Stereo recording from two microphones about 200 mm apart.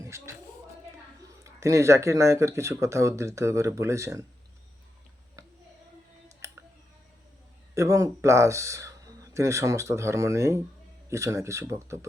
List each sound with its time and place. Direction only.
0.0 s speech: 15° right (ahead or behind)
1.4 s speech: 15° right (ahead or behind)
5.4 s a sound: 15° right (ahead or behind)
6.2 s clicking: 15° right (ahead or behind)
7.8 s speech: 15° right (ahead or behind)